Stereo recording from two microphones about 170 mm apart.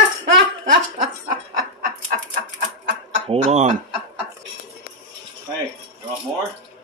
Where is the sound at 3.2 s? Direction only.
40° right (ahead or behind).